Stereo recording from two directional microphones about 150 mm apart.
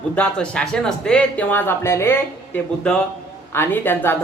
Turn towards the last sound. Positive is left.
turn(degrees=15)  # may be behind; listen again after turning